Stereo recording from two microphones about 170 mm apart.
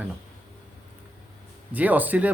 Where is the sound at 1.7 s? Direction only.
10° right (ahead or behind).